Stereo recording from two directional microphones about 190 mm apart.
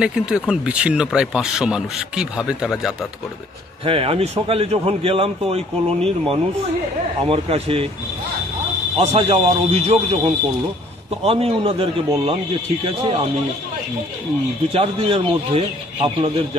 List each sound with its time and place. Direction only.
0.0 s speech: 5° right (ahead or behind)
3.8 s a man's voice: 30° right (ahead or behind)
8.9 s a man's voice: 30° right (ahead or behind)
14.7 s a man's voice: 30° right (ahead or behind)